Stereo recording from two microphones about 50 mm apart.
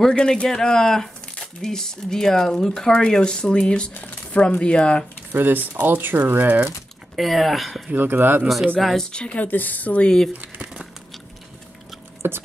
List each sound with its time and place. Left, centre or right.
0.1 s speech: centre
3.9 s speech: left
4.4 s speech: left
5.3 s speech: right
7.2 s speech: centre
8.0 s speech: right
8.8 s speech: centre
9.4 s speech: left
10.0 s speech: centre
10.3 s crumpling: right
12.2 s chopping: right